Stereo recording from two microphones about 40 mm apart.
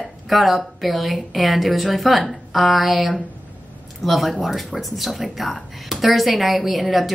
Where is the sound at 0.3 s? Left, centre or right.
Centre.